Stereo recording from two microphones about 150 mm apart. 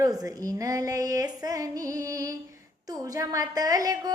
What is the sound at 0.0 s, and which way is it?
A woman's voice, 25° right (ahead or behind).